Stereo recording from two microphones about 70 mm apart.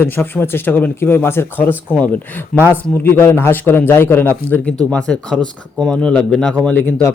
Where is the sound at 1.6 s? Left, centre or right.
Left.